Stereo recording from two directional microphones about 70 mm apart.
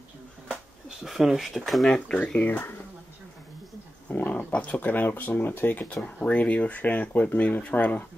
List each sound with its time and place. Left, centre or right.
0.8 s speech: centre
2.0 s speech: centre
4.1 s a sound: left
4.5 s speech: centre